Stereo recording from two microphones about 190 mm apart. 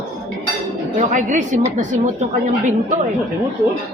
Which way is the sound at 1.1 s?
40° right (ahead or behind).